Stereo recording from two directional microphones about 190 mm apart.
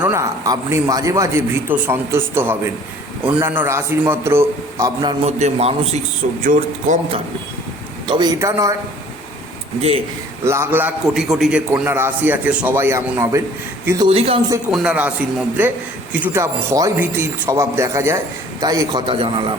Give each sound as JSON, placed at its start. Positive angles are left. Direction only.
{"t": 0.0, "sound": "a man's voice", "side_deg": -15}
{"t": 5.2, "sound": "a man's voice", "side_deg": -35}
{"t": 6.4, "sound": "a man's voice", "side_deg": -45}
{"t": 8.0, "sound": "a man's voice", "side_deg": -20}
{"t": 10.4, "sound": "a man's voice", "side_deg": -15}
{"t": 14.1, "sound": "a man's voice", "side_deg": -30}
{"t": 14.7, "sound": "a man's voice", "side_deg": -5}